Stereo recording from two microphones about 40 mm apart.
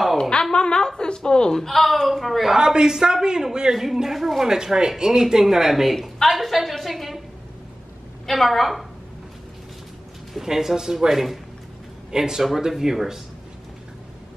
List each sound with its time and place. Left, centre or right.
0.2 s a sound: centre
1.5 s a man's voice: centre
2.5 s a man's voice: centre
4.5 s speech: centre
5.9 s a woman's voice: centre
8.3 s a man's voice: centre
10.4 s speech: centre